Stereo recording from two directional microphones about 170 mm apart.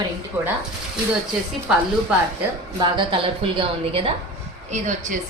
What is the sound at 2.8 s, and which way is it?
A woman's voice, 30° right (ahead or behind).